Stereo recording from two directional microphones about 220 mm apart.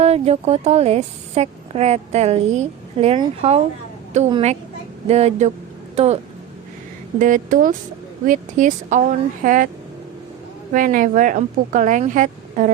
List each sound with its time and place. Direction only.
0.0 s speech: 30° right (ahead or behind)
7.2 s speech: 35° right (ahead or behind)
10.7 s speech: 35° right (ahead or behind)